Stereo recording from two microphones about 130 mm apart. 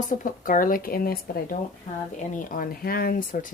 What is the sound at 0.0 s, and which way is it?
Speech, 90° left.